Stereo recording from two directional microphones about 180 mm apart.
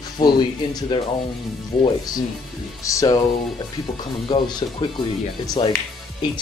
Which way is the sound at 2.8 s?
15° left (ahead or behind).